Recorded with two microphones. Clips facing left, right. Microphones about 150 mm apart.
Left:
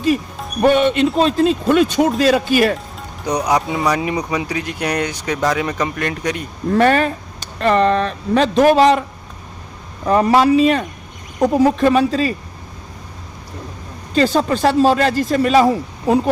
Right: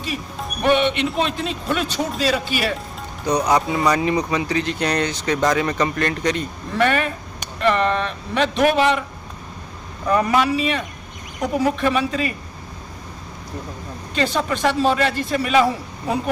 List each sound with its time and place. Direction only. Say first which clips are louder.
0.6 s speech: left 5 dB; 45° left (ahead or behind)
2.0 s speech: left 7 dB; 55° left (ahead or behind)
3.2 s speech: left 1 dB; 15° left (ahead or behind)
6.7 s speech: left 6 dB; 40° left (ahead or behind)
10.1 s speech: left 5 dB; 35° left (ahead or behind)
14.1 s speech: left 6 dB; 40° left (ahead or behind)